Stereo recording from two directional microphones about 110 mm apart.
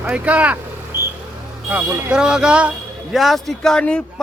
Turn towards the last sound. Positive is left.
turn(degrees=10)  # may be behind; listen again after turning